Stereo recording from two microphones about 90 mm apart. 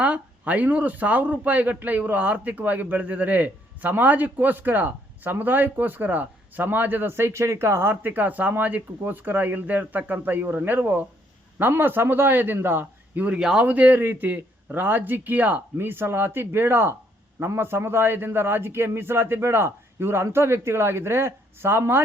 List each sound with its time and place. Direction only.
0.0 s speech: 15° right (ahead or behind)
13.4 s speech: 5° right (ahead or behind)
13.7 s speech: 15° right (ahead or behind)